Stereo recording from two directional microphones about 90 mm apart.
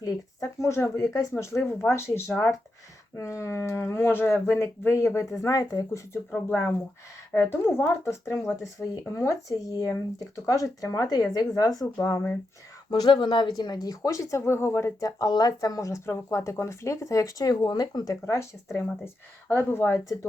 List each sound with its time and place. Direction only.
0.0 s speech: 35° left (ahead or behind)
6.3 s speech: 20° left (ahead or behind); by 12.2 s 40° left (ahead or behind)
12.9 s speech: 55° left (ahead or behind)
13.8 s speech: 40° left (ahead or behind); by 14.9 s 25° left (ahead or behind)
15.0 s speech: 50° left (ahead or behind)
18.8 s speech: 20° left (ahead or behind)